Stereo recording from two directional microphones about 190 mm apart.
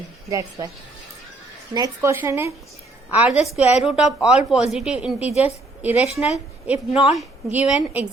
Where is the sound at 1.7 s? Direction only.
15° right (ahead or behind).